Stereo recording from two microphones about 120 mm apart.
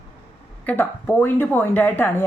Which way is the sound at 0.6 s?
15° left (ahead or behind).